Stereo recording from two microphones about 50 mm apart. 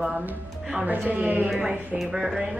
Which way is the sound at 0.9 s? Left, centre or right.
Right.